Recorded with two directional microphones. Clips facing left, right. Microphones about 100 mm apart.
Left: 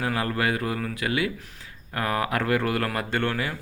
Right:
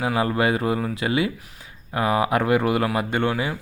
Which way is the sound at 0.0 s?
15° right (ahead or behind).